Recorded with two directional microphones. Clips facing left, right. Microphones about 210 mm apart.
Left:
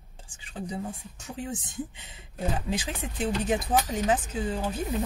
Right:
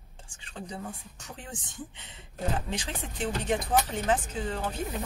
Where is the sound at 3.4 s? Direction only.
10° left (ahead or behind).